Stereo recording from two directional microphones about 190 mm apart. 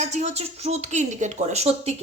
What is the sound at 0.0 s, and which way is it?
A woman's voice, 35° right (ahead or behind).